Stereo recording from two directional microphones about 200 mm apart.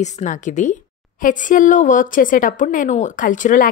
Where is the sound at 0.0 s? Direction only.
35° left (ahead or behind).